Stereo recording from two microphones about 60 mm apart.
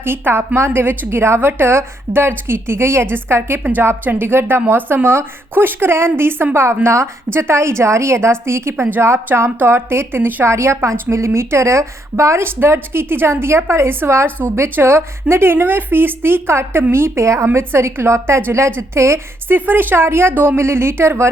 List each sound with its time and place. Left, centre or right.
0.0 s speech: right
3.6 s a woman's voice: right
10.4 s speech: right
11.1 s speech: right
17.2 s speech: right
19.5 s speech: right
20.6 s speech: right